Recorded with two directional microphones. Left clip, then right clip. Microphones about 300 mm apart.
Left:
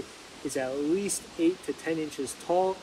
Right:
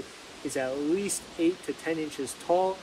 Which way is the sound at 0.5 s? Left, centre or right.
Centre.